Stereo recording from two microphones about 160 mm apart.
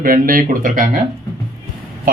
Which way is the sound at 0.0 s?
60° right (ahead or behind).